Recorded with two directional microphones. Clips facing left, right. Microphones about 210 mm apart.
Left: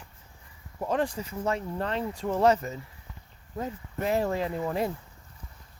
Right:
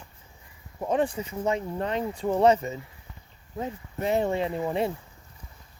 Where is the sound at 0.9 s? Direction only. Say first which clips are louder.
Right 3 dB; 5° right (ahead or behind).